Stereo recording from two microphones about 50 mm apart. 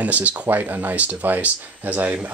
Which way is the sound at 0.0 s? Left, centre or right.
Right.